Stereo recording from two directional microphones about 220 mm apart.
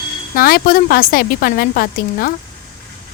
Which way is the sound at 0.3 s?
40° left (ahead or behind).